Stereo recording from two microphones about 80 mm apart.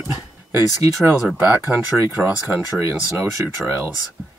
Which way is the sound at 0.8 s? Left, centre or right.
Right.